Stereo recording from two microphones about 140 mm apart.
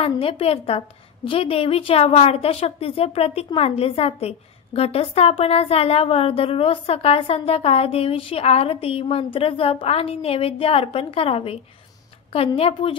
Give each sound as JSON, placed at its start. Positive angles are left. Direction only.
{"t": 0.0, "sound": "a woman's voice", "side_deg": 40}